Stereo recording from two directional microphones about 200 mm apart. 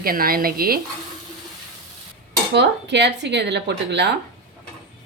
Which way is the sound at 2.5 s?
60° right (ahead or behind).